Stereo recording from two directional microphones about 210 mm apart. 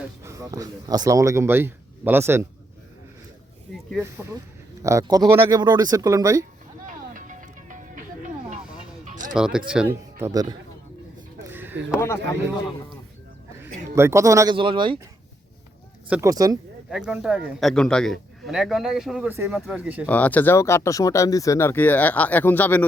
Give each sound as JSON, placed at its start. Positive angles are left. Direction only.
{"t": 0.2, "sound": "speech", "side_deg": -15}
{"t": 4.8, "sound": "speech", "side_deg": -15}
{"t": 6.8, "sound": "music", "side_deg": -35}
{"t": 9.3, "sound": "a man's voice", "side_deg": -5}
{"t": 11.5, "sound": "a sound", "side_deg": -10}
{"t": 11.9, "sound": "speech", "side_deg": 10}
{"t": 13.9, "sound": "speech", "side_deg": -15}
{"t": 16.0, "sound": "speech", "side_deg": -5}
{"t": 16.3, "sound": "speech", "side_deg": -15}
{"t": 16.9, "sound": "a man's voice", "side_deg": -5}
{"t": 20.1, "sound": "speech", "side_deg": 5}